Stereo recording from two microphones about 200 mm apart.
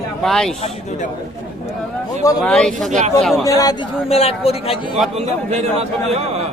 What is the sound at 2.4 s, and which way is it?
Speech, 5° left (ahead or behind).